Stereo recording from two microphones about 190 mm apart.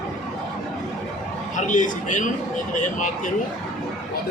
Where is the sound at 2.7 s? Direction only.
40° left (ahead or behind).